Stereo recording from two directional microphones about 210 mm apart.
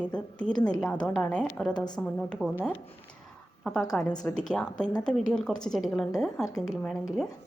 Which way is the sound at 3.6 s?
Centre (ahead or behind).